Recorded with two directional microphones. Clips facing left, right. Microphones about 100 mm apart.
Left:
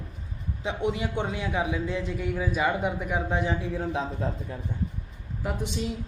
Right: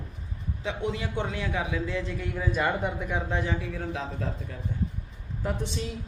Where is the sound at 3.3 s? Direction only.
20° left (ahead or behind).